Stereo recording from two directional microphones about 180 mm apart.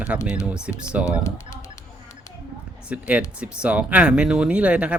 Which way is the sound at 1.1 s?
20° left (ahead or behind).